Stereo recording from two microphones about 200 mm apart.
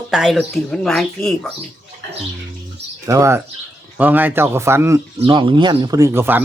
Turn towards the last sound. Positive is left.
turn(degrees=-10)  # may be behind; listen again after turning